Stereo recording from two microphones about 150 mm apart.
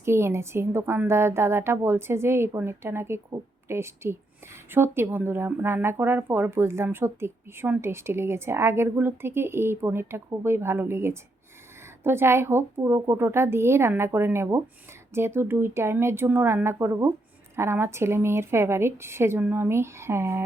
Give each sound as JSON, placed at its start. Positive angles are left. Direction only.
{"t": 0.0, "sound": "speech", "side_deg": -15}